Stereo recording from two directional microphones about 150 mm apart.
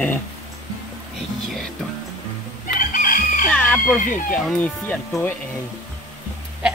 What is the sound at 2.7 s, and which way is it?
Chicken, 65° left (ahead or behind).